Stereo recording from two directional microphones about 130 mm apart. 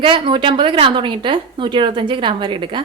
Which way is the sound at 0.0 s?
40° right (ahead or behind).